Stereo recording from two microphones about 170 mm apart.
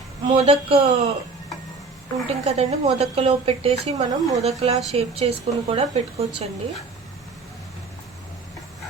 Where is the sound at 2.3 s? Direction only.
35° right (ahead or behind).